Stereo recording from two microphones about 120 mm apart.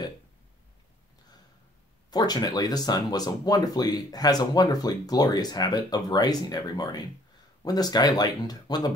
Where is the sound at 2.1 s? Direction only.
35° left (ahead or behind).